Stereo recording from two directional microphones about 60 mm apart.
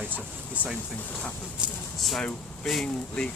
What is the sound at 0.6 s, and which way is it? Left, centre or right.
Speech, right.